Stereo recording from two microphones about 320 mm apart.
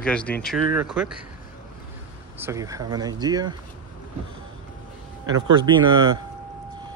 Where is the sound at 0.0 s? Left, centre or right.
Centre.